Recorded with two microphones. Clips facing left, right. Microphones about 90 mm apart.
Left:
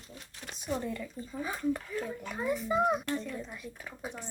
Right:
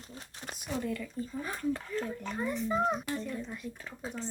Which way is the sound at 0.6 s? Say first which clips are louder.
Left 1 dB; 25° left (ahead or behind).